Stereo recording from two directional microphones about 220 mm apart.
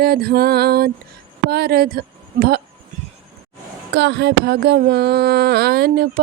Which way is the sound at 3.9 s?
50° right (ahead or behind).